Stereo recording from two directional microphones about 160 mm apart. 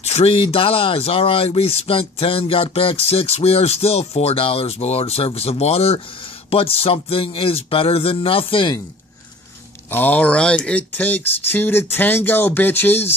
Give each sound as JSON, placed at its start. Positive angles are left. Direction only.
{"t": 0.1, "sound": "speech", "side_deg": 35}
{"t": 9.8, "sound": "speech", "side_deg": 10}